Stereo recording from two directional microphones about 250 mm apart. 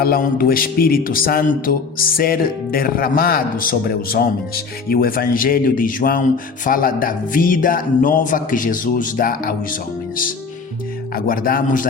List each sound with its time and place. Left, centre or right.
0.0 s speech: left
11.1 s speech: left